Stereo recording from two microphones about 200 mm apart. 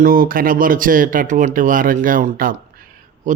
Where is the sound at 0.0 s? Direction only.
45° right (ahead or behind).